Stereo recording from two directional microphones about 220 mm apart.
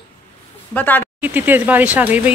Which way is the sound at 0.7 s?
10° left (ahead or behind).